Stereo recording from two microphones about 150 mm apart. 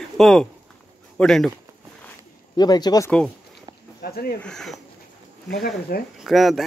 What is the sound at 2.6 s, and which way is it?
Speech, 25° left (ahead or behind).